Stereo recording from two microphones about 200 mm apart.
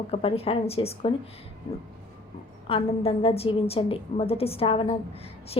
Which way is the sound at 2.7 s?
30° left (ahead or behind).